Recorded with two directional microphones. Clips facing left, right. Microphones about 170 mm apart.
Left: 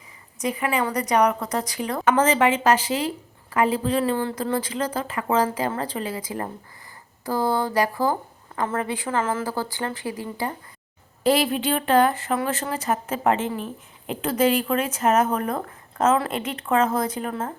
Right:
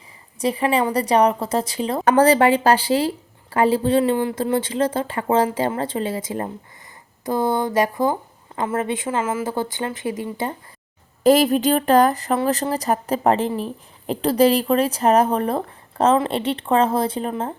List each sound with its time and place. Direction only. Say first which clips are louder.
0.3 s speech: right 5 dB; 30° right (ahead or behind)
11.2 s speech: right 6 dB; 45° right (ahead or behind); by 17.5 s 25° right (ahead or behind)